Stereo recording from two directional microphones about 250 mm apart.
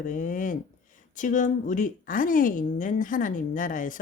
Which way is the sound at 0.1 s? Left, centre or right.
Left.